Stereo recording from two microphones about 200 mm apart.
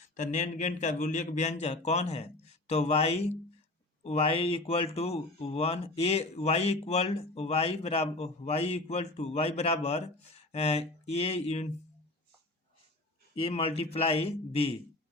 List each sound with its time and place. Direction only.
0.2 s speech: 35° left (ahead or behind)
13.3 s a man's voice: 30° left (ahead or behind)